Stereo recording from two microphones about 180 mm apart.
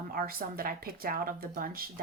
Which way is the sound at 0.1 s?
55° right (ahead or behind).